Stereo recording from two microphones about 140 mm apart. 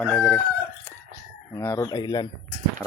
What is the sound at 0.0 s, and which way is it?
Speech, 10° left (ahead or behind).